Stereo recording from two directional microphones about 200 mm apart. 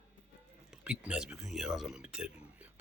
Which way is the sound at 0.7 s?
5° right (ahead or behind).